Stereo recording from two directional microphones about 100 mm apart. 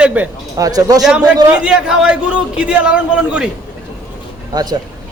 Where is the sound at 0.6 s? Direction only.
40° right (ahead or behind).